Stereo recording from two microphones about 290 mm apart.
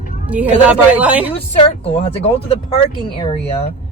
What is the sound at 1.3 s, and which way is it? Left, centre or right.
Speech, centre.